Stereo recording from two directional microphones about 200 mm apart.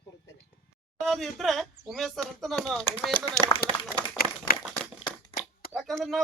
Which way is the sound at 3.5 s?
20° left (ahead or behind).